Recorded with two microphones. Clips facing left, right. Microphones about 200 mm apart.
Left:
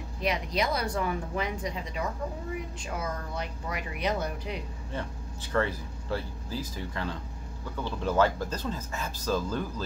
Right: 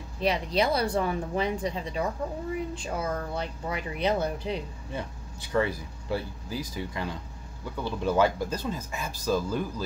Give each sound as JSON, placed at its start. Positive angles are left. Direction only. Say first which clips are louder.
{"t": 0.2, "sound": "speech", "louder": "right 4 dB", "side_deg": -30}
{"t": 4.9, "sound": "speech", "louder": "even", "side_deg": -10}